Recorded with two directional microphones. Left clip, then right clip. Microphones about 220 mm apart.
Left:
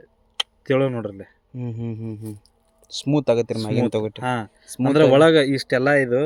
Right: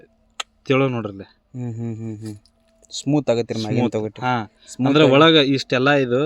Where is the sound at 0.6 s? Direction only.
25° right (ahead or behind).